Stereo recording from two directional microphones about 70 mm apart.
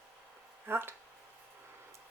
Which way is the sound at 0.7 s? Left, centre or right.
Right.